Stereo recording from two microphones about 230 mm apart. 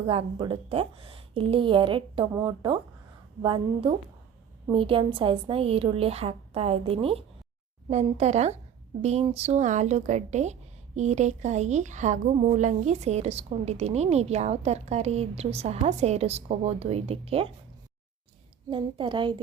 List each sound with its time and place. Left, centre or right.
0.1 s speech: right
18.7 s speech: right